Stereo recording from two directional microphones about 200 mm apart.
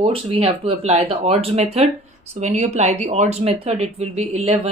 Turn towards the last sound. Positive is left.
turn(degrees=-30)  # may be behind; listen again after turning